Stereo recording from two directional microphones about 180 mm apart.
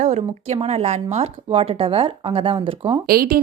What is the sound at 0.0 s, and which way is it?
Speech, 40° right (ahead or behind).